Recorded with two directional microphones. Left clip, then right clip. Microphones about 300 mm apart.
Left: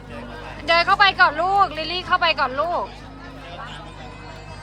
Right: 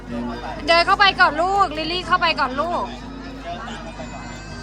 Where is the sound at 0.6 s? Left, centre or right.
Centre.